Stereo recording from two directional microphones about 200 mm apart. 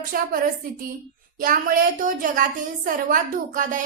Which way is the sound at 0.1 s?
45° right (ahead or behind).